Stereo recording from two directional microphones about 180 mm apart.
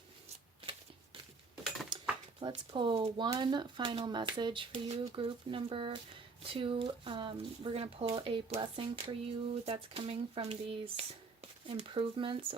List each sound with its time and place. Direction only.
1.9 s dishes: 25° right (ahead or behind)
2.4 s speech: 25° right (ahead or behind)